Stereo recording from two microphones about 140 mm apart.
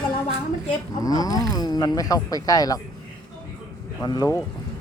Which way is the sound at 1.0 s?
25° left (ahead or behind).